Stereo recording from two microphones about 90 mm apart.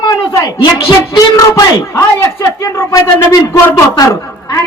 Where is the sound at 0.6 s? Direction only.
50° left (ahead or behind).